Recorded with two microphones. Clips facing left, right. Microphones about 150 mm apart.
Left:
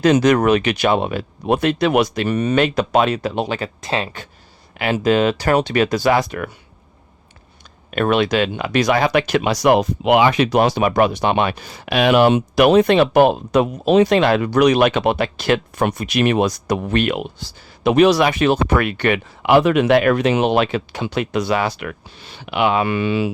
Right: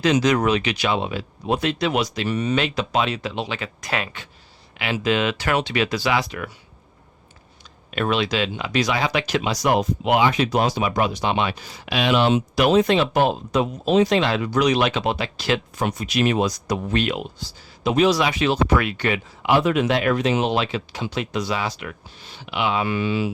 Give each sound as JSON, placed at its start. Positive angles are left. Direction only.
{"t": 0.0, "sound": "speech", "side_deg": 50}
{"t": 3.8, "sound": "speech", "side_deg": 25}
{"t": 4.8, "sound": "speech", "side_deg": 45}
{"t": 7.9, "sound": "speech", "side_deg": 50}